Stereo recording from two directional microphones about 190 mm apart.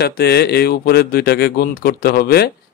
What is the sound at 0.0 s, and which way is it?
Speech, 60° left (ahead or behind).